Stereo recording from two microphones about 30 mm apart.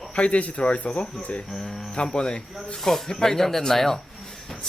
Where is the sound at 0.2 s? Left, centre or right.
Left.